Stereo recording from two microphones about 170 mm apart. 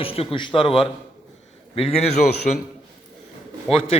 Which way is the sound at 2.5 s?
50° left (ahead or behind).